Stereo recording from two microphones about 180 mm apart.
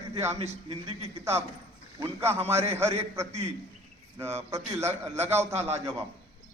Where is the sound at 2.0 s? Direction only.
15° right (ahead or behind).